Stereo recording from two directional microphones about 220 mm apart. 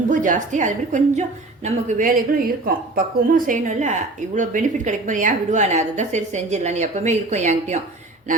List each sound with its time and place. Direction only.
0.1 s a woman's voice: 35° right (ahead or behind)